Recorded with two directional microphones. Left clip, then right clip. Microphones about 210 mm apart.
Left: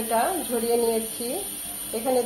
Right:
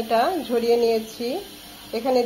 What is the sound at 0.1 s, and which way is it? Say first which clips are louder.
Speech: right 3 dB; 40° right (ahead or behind).